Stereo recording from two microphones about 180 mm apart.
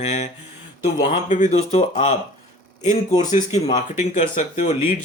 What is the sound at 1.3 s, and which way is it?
Speech, 40° left (ahead or behind).